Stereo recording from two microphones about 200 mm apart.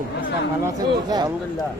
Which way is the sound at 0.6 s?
20° right (ahead or behind).